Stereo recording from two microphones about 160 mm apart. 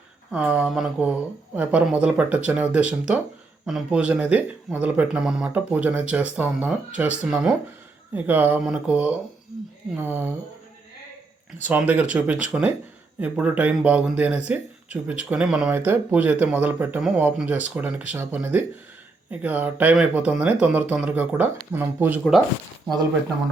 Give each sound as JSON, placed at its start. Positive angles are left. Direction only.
{"t": 0.3, "sound": "speech", "side_deg": -5}
{"t": 8.1, "sound": "speech", "side_deg": -10}
{"t": 11.7, "sound": "speech", "side_deg": -10}